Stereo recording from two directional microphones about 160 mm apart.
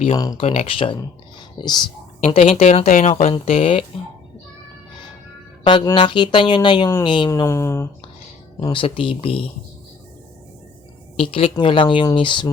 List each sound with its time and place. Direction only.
0.2 s speech: 25° left (ahead or behind)
0.4 s speech: 35° left (ahead or behind)
2.2 s speech: 40° left (ahead or behind)
5.6 s speech: 30° left (ahead or behind)
7.3 s speech: 20° left (ahead or behind)
8.5 s speech: 30° left (ahead or behind)
11.2 s speech: 35° left (ahead or behind)